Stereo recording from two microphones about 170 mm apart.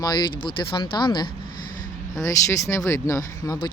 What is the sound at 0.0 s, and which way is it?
Speech, 25° left (ahead or behind).